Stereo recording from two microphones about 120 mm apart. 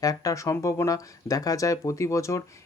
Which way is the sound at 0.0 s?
30° left (ahead or behind).